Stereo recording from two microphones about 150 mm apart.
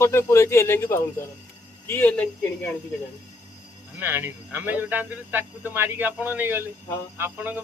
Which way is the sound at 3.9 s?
15° right (ahead or behind).